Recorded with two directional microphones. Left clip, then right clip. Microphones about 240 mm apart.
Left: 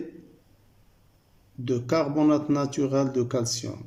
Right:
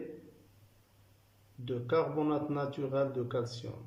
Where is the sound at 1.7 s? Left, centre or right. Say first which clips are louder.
Left 6 dB; left.